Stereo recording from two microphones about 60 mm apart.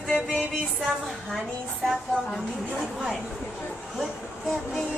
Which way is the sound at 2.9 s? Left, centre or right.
Centre.